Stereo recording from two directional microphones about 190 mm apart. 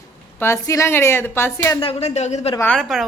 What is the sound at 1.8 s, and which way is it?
Speech, 30° left (ahead or behind).